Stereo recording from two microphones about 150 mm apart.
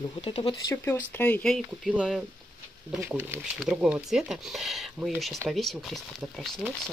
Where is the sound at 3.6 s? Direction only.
5° right (ahead or behind).